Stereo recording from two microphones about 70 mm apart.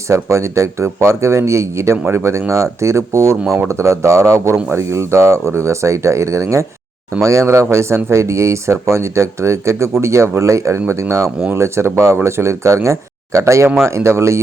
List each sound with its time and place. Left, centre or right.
0.1 s speech: right